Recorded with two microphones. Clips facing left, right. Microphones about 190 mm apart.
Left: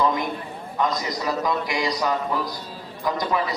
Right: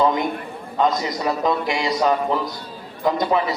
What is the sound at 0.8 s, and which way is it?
A man's voice, 25° right (ahead or behind).